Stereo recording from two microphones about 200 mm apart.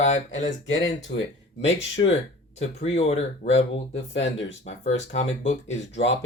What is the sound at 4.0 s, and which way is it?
Speech, 65° left (ahead or behind).